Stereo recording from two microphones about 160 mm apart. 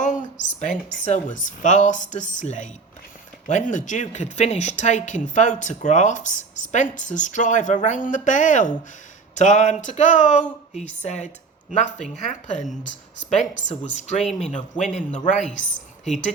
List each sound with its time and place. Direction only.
0.0 s a woman's voice: 50° left (ahead or behind)